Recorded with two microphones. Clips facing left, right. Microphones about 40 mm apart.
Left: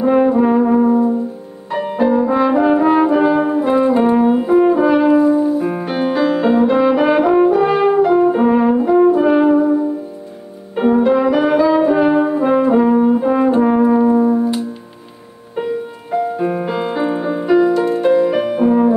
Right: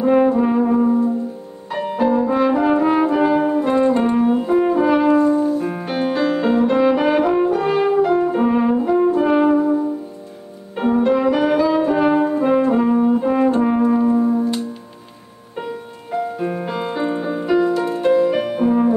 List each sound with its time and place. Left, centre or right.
0.0 s brass instrument: centre
1.7 s french horn: centre
10.8 s brass instrument: centre
15.5 s music: centre